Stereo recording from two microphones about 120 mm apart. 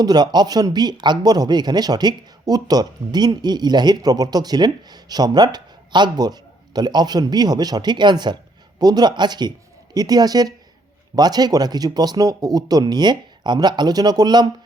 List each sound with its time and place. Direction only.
0.0 s speech: 35° right (ahead or behind)